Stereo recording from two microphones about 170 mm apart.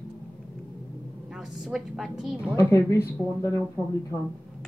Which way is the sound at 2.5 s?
15° left (ahead or behind).